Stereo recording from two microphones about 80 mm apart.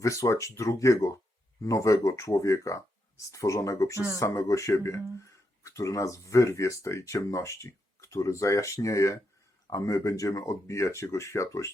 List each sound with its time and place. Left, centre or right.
0.0 s speech: left